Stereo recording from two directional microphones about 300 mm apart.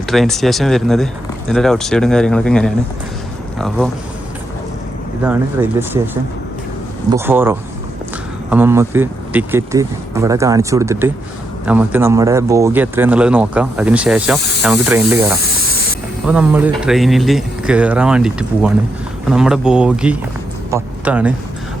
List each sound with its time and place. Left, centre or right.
0.1 s speech: centre
5.2 s speech: centre
7.1 s speech: centre